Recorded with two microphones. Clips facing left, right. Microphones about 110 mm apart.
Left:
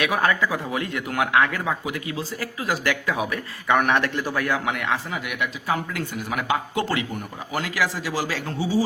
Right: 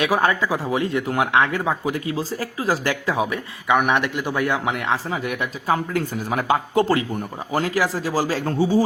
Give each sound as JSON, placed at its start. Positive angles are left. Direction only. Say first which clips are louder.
{"t": 0.0, "sound": "speech", "louder": "right 2 dB", "side_deg": -25}
{"t": 3.7, "sound": "a man's voice", "louder": "right 1 dB", "side_deg": -10}